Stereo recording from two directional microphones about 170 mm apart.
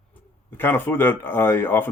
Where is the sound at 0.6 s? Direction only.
10° left (ahead or behind).